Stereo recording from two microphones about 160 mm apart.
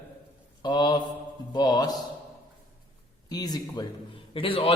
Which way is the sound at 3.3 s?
25° left (ahead or behind).